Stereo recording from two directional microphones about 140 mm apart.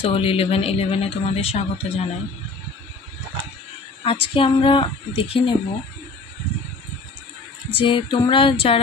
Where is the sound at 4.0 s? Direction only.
40° left (ahead or behind).